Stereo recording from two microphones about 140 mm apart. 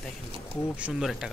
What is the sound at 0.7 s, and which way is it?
Speech, 5° right (ahead or behind).